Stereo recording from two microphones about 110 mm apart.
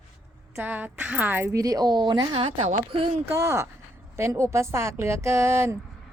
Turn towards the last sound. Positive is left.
turn(degrees=-25)  # may be behind; listen again after turning